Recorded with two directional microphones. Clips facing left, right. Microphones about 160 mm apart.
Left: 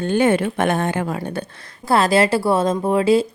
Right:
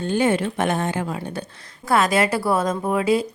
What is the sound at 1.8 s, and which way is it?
A woman's voice, 30° left (ahead or behind).